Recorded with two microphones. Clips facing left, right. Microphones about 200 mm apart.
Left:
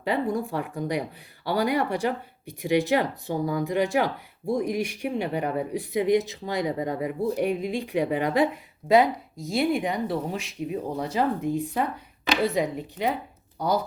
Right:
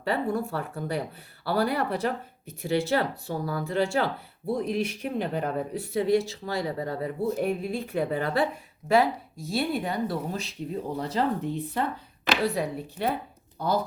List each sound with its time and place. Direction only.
0.0 s speech: 15° left (ahead or behind)